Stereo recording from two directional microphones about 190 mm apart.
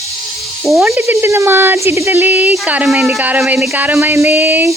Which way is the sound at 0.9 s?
15° right (ahead or behind).